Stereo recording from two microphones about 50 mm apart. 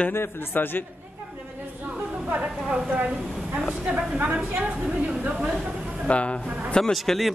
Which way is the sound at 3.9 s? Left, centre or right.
Centre.